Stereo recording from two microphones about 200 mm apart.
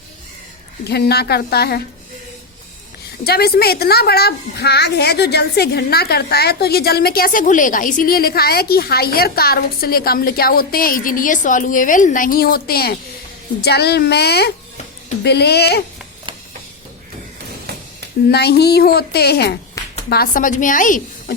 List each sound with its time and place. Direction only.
0.9 s a child's voice: 55° left (ahead or behind)
3.2 s a child's voice: 50° left (ahead or behind)
18.3 s a child's voice: 55° left (ahead or behind)